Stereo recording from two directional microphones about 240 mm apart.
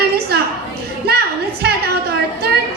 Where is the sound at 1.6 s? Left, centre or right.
Right.